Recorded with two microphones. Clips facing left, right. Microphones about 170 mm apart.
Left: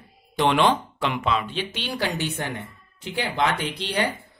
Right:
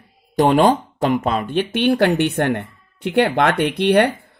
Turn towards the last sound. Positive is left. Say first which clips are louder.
# right 11 dB
turn(degrees=-60)  # may be behind; listen again after turning